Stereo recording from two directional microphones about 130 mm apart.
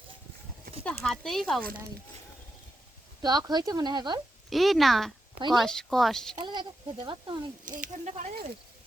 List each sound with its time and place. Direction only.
0.9 s speech: 5° left (ahead or behind)
3.2 s speech: 30° right (ahead or behind)
4.4 s speech: centre (ahead or behind)
6.4 s speech: 35° right (ahead or behind)
7.6 s speech: 90° right